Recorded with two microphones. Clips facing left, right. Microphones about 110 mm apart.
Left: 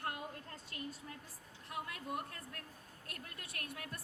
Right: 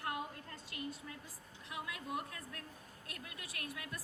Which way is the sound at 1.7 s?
50° left (ahead or behind).